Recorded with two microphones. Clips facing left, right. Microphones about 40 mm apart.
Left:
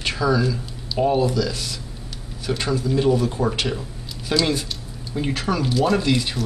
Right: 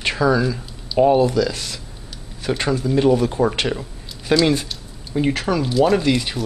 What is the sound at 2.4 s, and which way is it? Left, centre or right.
Speech, right.